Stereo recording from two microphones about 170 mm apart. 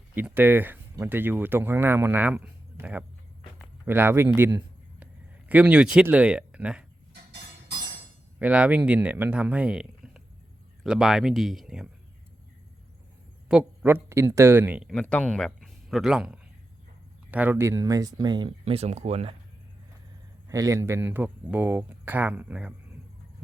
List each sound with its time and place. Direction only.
0.1 s speech: 10° right (ahead or behind)
8.4 s speech: 5° right (ahead or behind)
13.5 s speech: 10° right (ahead or behind)
14.9 s speech: 10° left (ahead or behind); by 18.5 s 25° right (ahead or behind)
18.6 s speech: 35° right (ahead or behind)
20.5 s speech: 20° right (ahead or behind)